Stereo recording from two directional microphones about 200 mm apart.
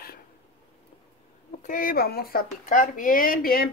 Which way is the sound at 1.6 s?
40° left (ahead or behind).